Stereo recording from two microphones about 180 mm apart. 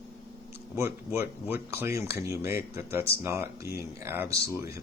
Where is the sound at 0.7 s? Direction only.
15° right (ahead or behind).